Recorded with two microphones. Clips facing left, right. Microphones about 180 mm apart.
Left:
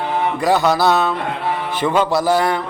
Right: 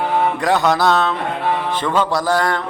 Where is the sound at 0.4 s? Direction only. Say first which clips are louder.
Left 2 dB; 5° left (ahead or behind).